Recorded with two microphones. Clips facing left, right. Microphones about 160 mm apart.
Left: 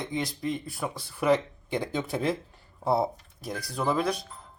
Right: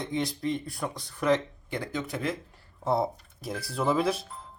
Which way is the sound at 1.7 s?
25° left (ahead or behind).